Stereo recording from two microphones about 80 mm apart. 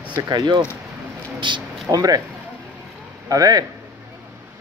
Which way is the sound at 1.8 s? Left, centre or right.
Right.